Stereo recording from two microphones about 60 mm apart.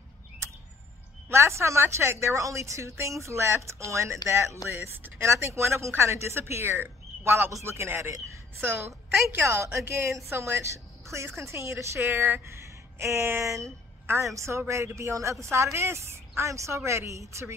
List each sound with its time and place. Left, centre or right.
1.3 s a woman's voice: right
8.5 s speech: right
8.8 s a woman's voice: right
14.0 s a woman's voice: right